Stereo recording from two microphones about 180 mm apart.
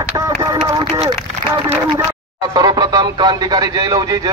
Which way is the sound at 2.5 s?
20° right (ahead or behind).